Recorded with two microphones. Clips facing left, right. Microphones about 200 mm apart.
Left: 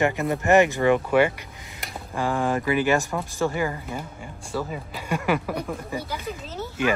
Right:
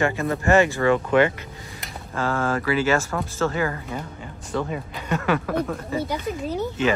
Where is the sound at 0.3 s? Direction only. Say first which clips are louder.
Even; 15° left (ahead or behind).